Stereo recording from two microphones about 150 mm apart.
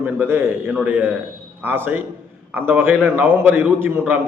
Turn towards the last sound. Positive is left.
turn(degrees=-15)  # may be behind; listen again after turning